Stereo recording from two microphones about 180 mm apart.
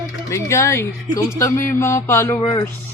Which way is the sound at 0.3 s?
15° left (ahead or behind).